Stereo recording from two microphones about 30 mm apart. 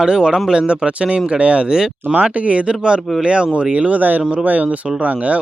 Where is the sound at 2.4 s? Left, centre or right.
Right.